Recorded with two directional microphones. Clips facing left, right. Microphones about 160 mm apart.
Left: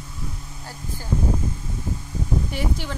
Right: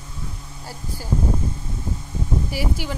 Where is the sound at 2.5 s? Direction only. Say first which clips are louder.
Right 1 dB; 5° right (ahead or behind).